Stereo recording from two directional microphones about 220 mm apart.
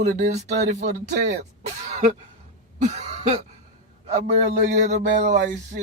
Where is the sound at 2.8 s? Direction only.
30° right (ahead or behind).